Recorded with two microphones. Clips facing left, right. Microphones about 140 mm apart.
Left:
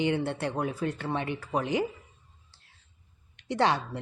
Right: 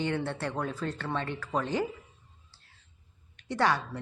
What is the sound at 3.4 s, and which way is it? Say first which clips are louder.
Speech: left 2 dB; 20° left (ahead or behind).